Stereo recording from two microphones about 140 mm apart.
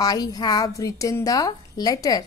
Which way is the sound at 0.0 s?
25° left (ahead or behind).